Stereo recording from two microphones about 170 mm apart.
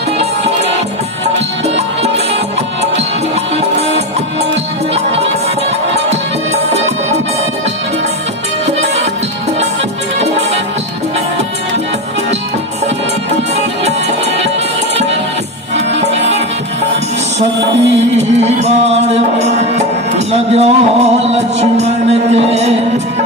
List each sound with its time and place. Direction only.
8.6 s music: 40° right (ahead or behind)
10.2 s music: 40° right (ahead or behind)
18.6 s music: 40° right (ahead or behind)